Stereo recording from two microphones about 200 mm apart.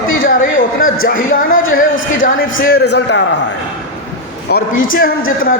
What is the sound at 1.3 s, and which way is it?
Speech, 45° left (ahead or behind).